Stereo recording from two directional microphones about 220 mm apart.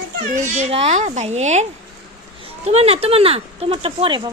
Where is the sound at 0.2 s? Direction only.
35° right (ahead or behind).